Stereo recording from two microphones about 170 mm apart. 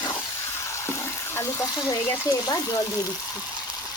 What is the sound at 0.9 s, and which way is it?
Water, 15° left (ahead or behind).